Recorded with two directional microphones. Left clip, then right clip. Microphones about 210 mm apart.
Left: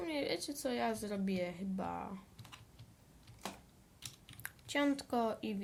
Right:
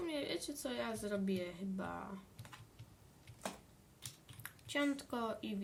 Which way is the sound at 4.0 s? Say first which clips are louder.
Left 4 dB; 45° left (ahead or behind).